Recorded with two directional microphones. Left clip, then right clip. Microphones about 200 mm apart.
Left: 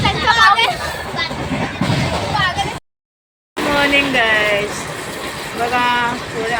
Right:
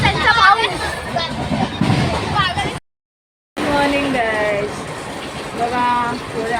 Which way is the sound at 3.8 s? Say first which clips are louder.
Left 5 dB; centre (ahead or behind).